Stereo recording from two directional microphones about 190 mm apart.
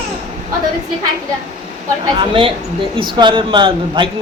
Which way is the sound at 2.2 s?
25° right (ahead or behind).